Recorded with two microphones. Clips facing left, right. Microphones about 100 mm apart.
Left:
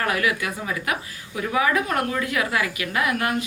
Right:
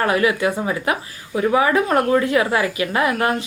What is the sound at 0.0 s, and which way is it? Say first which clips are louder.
A woman's voice: right 6 dB; 30° right (ahead or behind).